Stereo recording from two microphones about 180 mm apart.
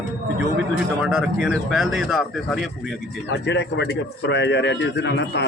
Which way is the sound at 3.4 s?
75° left (ahead or behind).